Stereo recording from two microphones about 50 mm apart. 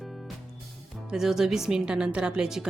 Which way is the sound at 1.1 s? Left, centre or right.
Centre.